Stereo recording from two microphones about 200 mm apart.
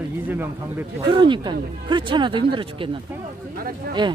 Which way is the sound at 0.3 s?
10° right (ahead or behind).